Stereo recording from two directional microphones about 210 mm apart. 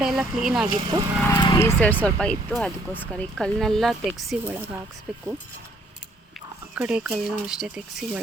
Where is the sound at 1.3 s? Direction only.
20° left (ahead or behind); by 5.2 s centre (ahead or behind).